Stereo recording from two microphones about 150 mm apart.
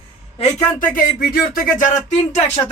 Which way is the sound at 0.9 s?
80° left.